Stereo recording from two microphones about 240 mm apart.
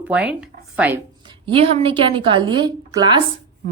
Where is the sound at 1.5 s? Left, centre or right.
Right.